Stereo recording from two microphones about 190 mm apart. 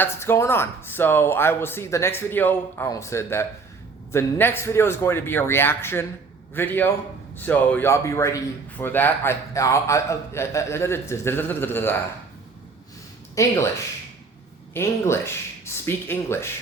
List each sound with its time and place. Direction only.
0.0 s a man's voice: 15° left (ahead or behind)
13.3 s a man's voice: 15° left (ahead or behind)
14.7 s a man's voice: 15° left (ahead or behind)